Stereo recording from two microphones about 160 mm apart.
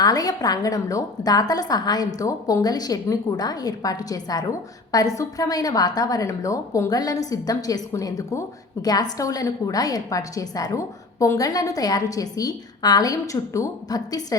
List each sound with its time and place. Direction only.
0.0 s a woman's voice: 25° left (ahead or behind)